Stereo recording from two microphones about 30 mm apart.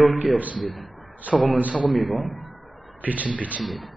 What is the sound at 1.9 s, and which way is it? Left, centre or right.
Speech, centre.